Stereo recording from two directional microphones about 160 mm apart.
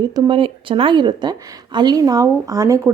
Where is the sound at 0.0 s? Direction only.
25° right (ahead or behind).